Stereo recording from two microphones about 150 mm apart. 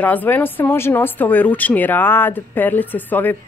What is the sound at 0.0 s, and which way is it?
Speech, 10° left (ahead or behind).